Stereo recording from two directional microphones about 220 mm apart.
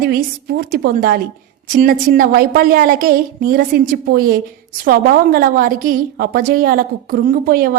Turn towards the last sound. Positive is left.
turn(degrees=-40)  # may be behind; listen again after turning